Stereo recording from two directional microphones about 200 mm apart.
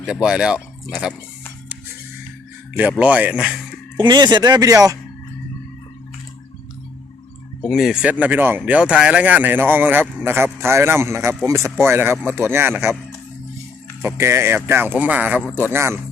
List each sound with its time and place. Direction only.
0.0 s speech: 5° right (ahead or behind)
3.0 s speech: 5° right (ahead or behind)
3.9 s speech: 20° right (ahead or behind)
7.7 s speech: centre (ahead or behind)
14.0 s speech: 10° right (ahead or behind)